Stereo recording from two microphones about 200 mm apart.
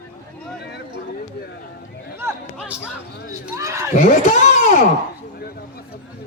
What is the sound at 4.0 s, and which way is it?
Speech, 40° left (ahead or behind).